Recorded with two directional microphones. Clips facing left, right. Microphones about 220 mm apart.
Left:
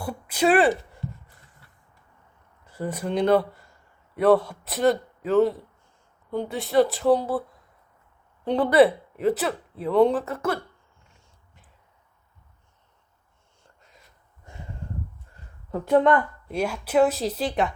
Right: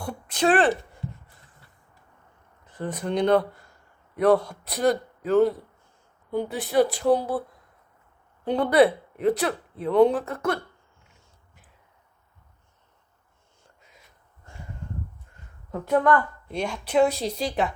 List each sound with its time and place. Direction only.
0.0 s speech: 5° left (ahead or behind)
2.7 s speech: 10° left (ahead or behind)
8.4 s speech: centre (ahead or behind)
15.9 s a woman's voice: 25° left (ahead or behind)
16.5 s speech: 5° left (ahead or behind)